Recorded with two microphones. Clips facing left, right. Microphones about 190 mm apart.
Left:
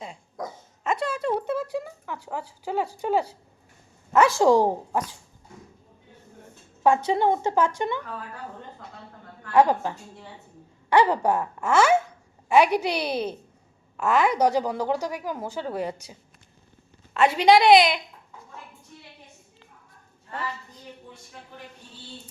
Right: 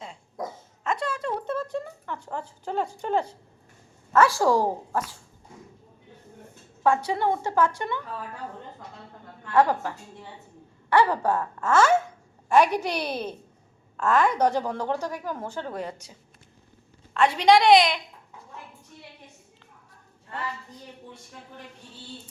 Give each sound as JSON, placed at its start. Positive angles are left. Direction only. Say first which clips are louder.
{"t": 0.9, "sound": "a sound", "louder": "left 3 dB", "side_deg": 10}
{"t": 1.7, "sound": "speech", "louder": "left 1 dB", "side_deg": 5}
{"t": 4.1, "sound": "speech", "louder": "left 2 dB", "side_deg": 20}
{"t": 6.8, "sound": "a woman's voice", "louder": "left 3 dB", "side_deg": 20}
{"t": 9.5, "sound": "a woman's voice", "louder": "left 2 dB", "side_deg": 20}
{"t": 17.2, "sound": "a woman's voice", "louder": "left 1 dB", "side_deg": 5}